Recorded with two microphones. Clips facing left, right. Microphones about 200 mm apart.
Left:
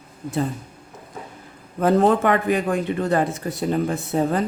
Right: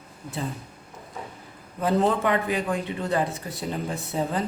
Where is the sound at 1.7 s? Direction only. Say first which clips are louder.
Left 6 dB; 55° left (ahead or behind).